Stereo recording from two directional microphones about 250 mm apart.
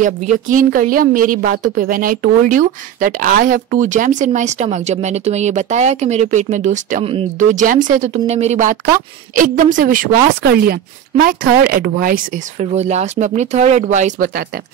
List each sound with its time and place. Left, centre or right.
0.3 s a woman's voice: right